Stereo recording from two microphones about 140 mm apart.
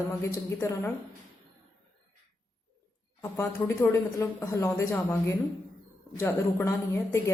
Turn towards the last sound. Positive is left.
turn(degrees=20)  # may be behind; listen again after turning